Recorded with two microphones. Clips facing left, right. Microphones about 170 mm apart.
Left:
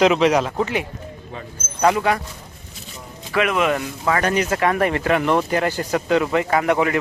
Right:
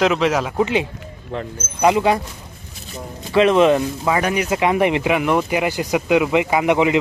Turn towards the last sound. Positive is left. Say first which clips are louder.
# right 2 dB
turn(degrees=-15)  # may be behind; listen again after turning